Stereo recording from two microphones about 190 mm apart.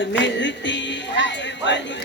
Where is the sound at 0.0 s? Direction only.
70° left (ahead or behind).